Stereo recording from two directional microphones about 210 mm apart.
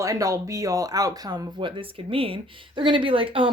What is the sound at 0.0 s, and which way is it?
A woman's voice, 15° right (ahead or behind).